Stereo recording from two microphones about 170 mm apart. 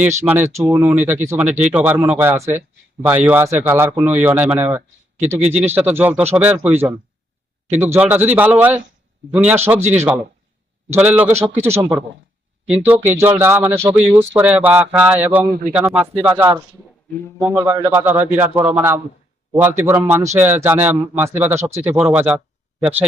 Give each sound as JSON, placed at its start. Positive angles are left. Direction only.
{"t": 0.3, "sound": "speech", "side_deg": -15}
{"t": 10.8, "sound": "speech", "side_deg": -10}
{"t": 15.4, "sound": "speech", "side_deg": -65}
{"t": 15.7, "sound": "speech", "side_deg": -10}